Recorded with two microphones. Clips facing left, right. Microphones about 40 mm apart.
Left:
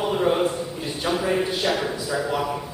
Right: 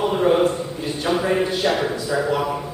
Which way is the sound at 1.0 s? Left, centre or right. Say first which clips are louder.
Right 3 dB; centre.